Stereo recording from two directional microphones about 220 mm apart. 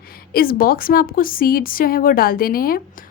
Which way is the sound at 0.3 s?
40° left (ahead or behind).